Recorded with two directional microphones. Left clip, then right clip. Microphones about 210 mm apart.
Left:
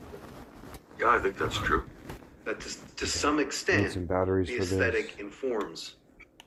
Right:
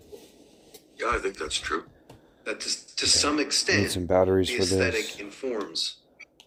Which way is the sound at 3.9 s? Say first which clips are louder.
Right 6 dB; 50° right (ahead or behind).